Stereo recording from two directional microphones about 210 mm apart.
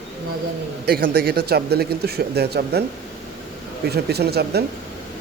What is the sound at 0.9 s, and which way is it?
Speech, 45° right (ahead or behind).